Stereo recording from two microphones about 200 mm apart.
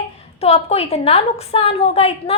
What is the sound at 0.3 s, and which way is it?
A woman's voice, 30° left (ahead or behind).